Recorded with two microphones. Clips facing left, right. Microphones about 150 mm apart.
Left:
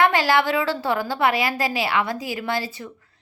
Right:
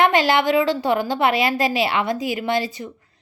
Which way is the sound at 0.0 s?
20° right (ahead or behind).